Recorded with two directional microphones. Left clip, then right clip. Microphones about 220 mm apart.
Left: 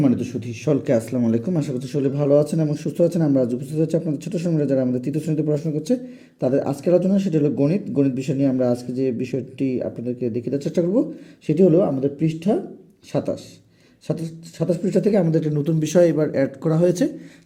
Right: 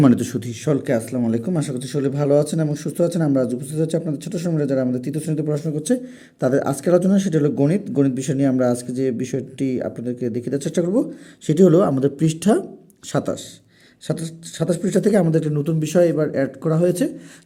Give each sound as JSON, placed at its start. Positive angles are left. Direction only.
{"t": 0.0, "sound": "speech", "side_deg": -25}
{"t": 0.7, "sound": "speech", "side_deg": 0}
{"t": 11.4, "sound": "speech", "side_deg": -25}
{"t": 13.1, "sound": "speech", "side_deg": -15}